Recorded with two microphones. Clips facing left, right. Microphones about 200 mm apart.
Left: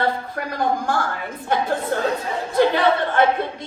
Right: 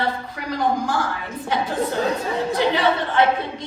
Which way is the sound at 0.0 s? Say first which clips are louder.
Left 2 dB; 50° left (ahead or behind).